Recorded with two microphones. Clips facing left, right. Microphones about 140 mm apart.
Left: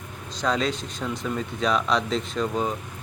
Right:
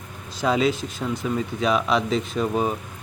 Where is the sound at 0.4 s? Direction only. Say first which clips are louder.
Right 4 dB; 5° right (ahead or behind).